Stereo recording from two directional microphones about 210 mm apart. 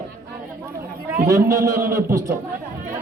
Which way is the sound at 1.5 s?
15° right (ahead or behind).